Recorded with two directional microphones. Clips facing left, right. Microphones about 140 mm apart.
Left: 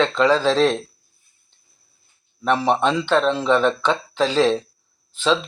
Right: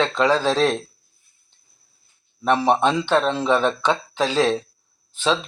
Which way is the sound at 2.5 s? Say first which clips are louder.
Right 1 dB; 15° right (ahead or behind).